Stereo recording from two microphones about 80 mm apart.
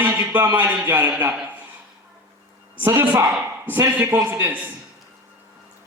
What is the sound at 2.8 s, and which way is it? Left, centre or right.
A man's voice, right.